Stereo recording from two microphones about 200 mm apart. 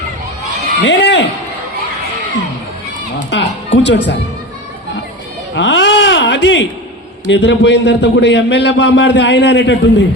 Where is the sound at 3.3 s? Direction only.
65° left (ahead or behind).